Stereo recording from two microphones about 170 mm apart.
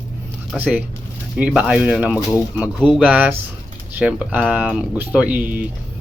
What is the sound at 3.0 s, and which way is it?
Speech, 10° right (ahead or behind).